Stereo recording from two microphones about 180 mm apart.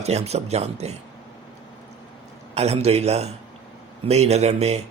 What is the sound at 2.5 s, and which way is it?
Speech, 35° right (ahead or behind).